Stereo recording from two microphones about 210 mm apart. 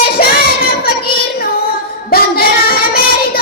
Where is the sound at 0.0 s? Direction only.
45° left (ahead or behind).